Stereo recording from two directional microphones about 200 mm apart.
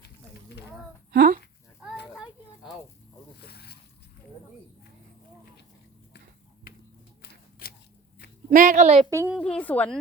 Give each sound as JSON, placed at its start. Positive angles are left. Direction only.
{"t": 1.1, "sound": "a sound", "side_deg": -50}
{"t": 3.4, "sound": "boat", "side_deg": 55}
{"t": 7.6, "sound": "biting", "side_deg": 50}
{"t": 8.4, "sound": "a woman's voice", "side_deg": -40}
{"t": 9.0, "sound": "a woman's voice", "side_deg": -15}
{"t": 9.3, "sound": "speech", "side_deg": 5}